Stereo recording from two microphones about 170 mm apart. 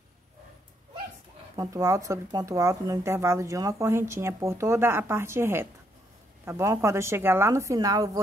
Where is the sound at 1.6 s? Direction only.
20° right (ahead or behind).